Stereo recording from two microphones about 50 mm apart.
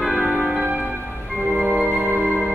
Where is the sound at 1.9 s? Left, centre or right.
Right.